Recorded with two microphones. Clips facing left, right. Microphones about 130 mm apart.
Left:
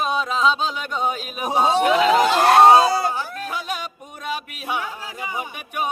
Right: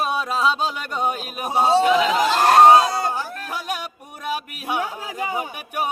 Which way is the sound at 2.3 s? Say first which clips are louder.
Right 2 dB; centre (ahead or behind).